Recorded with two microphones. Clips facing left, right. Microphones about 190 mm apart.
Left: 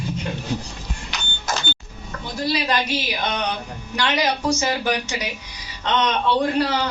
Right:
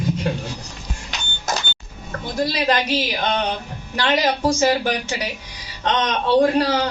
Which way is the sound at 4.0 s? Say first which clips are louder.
Right 3 dB; 50° right (ahead or behind).